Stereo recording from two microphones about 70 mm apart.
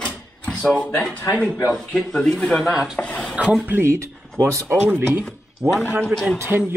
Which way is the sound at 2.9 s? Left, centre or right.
Centre.